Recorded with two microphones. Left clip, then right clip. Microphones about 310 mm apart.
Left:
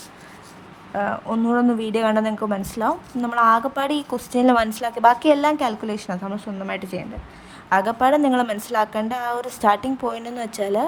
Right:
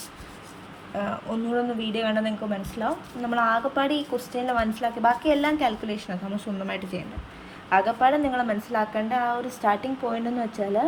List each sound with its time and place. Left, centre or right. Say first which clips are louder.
0.9 s a woman's voice: left 6 dB; centre
7.7 s a woman's voice: left 3 dB; left